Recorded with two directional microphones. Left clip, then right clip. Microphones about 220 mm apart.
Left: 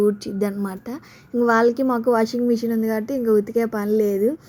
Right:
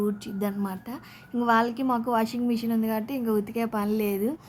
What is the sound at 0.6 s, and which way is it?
A woman's voice, 15° left (ahead or behind).